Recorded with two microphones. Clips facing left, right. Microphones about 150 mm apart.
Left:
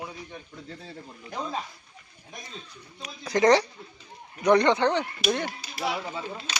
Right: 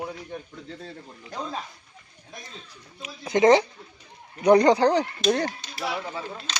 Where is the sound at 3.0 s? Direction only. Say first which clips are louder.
Right 3 dB; 25° right (ahead or behind).